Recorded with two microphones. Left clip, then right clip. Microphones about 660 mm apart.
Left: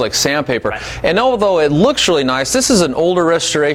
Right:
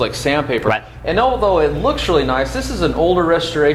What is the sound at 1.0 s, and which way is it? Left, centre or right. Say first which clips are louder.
Speech: left 3 dB; left.